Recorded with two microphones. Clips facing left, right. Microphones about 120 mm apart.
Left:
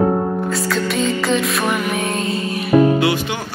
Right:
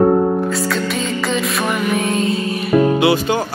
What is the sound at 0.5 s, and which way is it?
Music, centre (ahead or behind).